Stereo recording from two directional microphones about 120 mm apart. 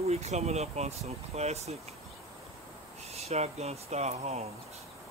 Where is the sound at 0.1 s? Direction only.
65° right (ahead or behind).